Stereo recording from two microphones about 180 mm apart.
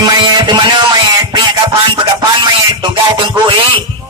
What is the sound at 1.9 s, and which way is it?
Music, 25° right (ahead or behind).